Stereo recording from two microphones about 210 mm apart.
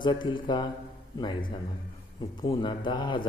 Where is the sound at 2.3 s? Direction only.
20° left (ahead or behind).